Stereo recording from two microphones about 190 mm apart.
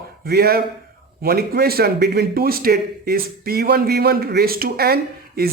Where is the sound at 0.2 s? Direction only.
55° right (ahead or behind).